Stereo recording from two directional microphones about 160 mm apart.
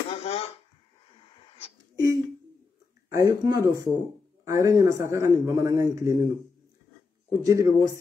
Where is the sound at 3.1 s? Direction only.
20° right (ahead or behind).